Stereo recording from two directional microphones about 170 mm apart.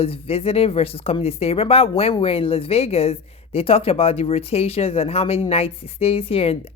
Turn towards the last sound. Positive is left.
turn(degrees=35)  # may be behind; listen again after turning